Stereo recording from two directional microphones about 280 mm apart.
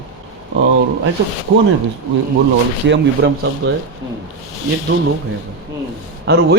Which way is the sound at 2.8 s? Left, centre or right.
Right.